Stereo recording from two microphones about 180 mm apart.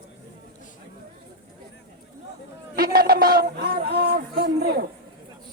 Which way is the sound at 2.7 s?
55° right (ahead or behind).